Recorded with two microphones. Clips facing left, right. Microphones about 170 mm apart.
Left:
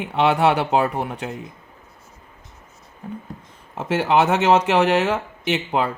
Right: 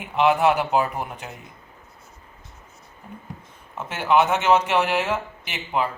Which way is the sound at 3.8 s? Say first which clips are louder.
Left 2 dB; 80° left.